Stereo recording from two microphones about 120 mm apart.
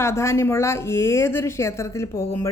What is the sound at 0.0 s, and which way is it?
Speech, 25° left (ahead or behind).